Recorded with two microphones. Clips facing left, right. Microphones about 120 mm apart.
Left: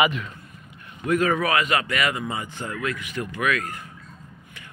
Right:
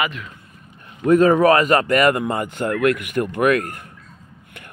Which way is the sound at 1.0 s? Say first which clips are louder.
Right 9 dB; 35° right (ahead or behind).